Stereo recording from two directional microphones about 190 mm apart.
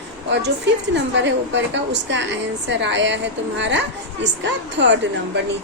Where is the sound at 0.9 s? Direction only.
70° right (ahead or behind).